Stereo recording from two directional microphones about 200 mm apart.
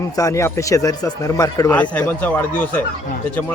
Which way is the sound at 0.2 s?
15° left (ahead or behind).